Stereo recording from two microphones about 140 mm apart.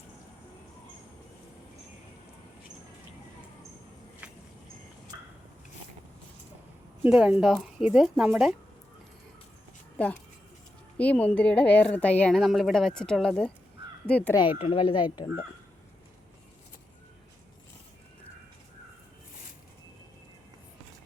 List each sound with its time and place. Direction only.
7.0 s a woman's voice: 10° right (ahead or behind)
10.9 s a woman's voice: 10° left (ahead or behind)
14.6 s speech: 40° left (ahead or behind)